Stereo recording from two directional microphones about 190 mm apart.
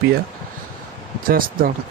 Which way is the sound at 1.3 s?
50° right (ahead or behind).